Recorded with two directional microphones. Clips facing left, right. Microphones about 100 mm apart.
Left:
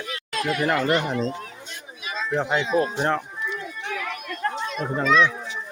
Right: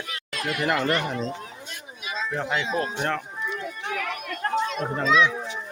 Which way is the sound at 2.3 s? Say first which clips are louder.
Left 5 dB; 20° left (ahead or behind).